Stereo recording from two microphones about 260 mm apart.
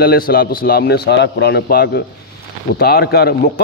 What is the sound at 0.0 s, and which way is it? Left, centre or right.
A man's voice, left.